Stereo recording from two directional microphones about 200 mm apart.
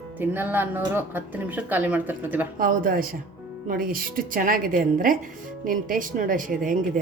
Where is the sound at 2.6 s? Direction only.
45° right (ahead or behind).